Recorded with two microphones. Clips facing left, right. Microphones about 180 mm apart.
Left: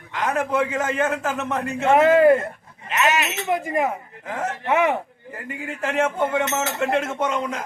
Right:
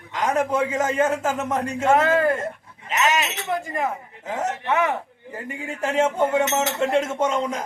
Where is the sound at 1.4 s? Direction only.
10° right (ahead or behind).